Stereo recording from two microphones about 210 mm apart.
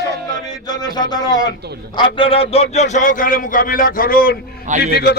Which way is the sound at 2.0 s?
25° left (ahead or behind).